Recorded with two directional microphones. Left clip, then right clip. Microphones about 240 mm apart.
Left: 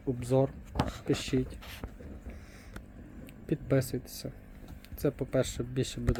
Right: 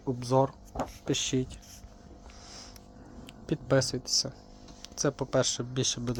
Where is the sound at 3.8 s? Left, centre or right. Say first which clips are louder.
Right 10 dB; left.